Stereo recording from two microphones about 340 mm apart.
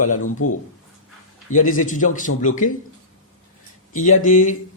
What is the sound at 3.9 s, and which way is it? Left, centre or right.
Speech, left.